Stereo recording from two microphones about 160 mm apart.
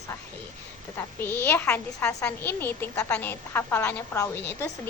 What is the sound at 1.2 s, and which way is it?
A woman's voice, 15° left (ahead or behind).